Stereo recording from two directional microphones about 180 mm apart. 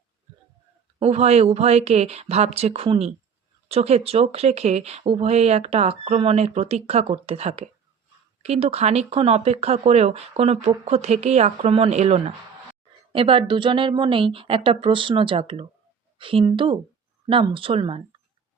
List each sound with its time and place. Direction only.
0.9 s a woman's voice: 35° right (ahead or behind)